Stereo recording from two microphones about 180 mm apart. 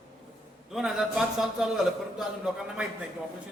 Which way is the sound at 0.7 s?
5° right (ahead or behind).